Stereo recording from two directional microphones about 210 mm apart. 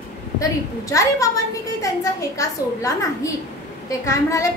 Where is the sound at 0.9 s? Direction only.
15° left (ahead or behind).